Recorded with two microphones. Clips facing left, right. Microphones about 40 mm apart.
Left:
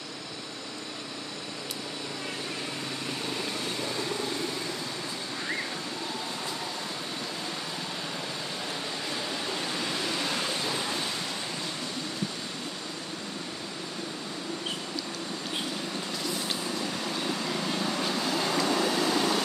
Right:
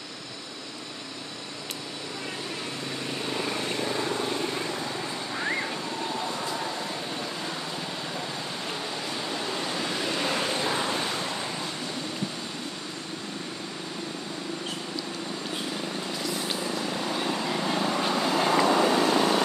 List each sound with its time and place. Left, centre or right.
9.8 s vehicle: centre
16.4 s vehicle: centre